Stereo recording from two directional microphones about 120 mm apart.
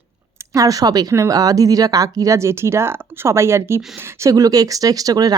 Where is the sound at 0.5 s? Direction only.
30° right (ahead or behind).